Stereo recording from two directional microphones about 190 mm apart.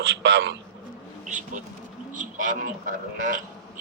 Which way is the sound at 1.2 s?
40° right (ahead or behind).